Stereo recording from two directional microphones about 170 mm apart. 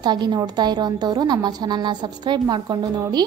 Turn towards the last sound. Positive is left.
turn(degrees=-25)  # may be behind; listen again after turning